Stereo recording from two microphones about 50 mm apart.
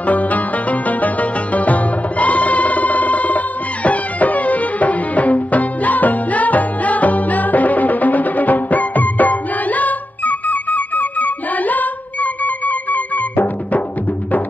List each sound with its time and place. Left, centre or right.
0.0 s music: left